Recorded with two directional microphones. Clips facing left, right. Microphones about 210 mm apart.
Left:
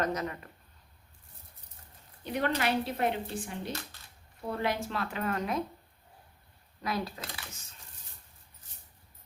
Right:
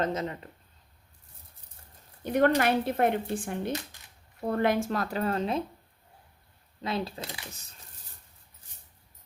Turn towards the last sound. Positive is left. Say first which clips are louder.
# right 3 dB
turn(degrees=-25)  # may be behind; listen again after turning